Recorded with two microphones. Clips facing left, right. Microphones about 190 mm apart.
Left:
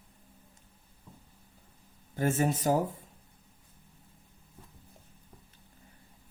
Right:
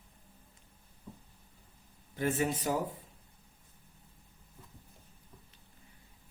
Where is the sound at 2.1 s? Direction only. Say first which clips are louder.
Left 3 dB; 45° left (ahead or behind).